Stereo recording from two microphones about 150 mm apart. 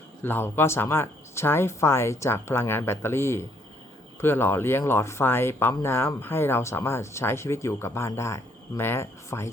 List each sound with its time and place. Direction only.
0.2 s speech: 15° left (ahead or behind)